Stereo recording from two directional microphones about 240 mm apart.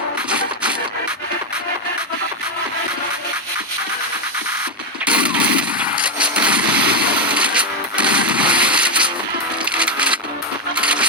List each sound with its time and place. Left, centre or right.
0.3 s music: centre
5.0 s a sound: centre
9.6 s wood: centre
10.8 s coin: centre